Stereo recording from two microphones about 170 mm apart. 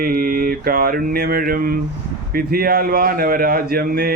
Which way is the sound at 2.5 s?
60° right (ahead or behind).